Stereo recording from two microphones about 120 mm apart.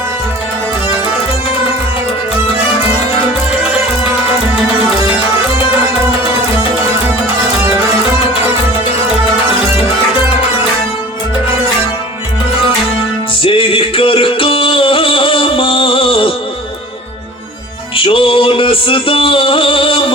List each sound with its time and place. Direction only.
13.4 s music: 50° left (ahead or behind)
17.9 s music: 45° left (ahead or behind)